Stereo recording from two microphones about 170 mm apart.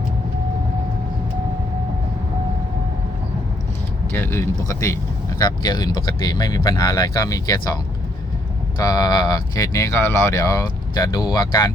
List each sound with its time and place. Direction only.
4.1 s speech: 15° left (ahead or behind)
8.8 s speech: 20° left (ahead or behind)